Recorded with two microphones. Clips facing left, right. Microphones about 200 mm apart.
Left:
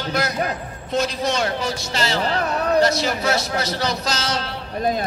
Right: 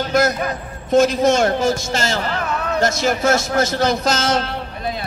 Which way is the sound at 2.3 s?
35° left (ahead or behind).